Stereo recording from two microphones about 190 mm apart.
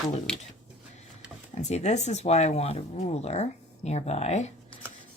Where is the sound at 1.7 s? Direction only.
35° left (ahead or behind).